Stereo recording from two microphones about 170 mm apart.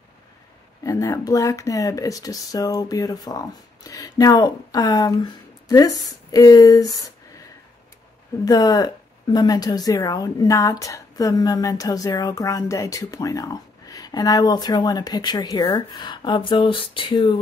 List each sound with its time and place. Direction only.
0.8 s a woman's voice: 20° left (ahead or behind)
8.5 s a woman's voice: 20° left (ahead or behind)